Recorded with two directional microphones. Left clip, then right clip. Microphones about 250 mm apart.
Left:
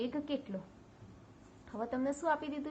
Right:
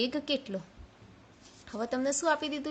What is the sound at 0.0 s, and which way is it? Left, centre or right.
Speech, right.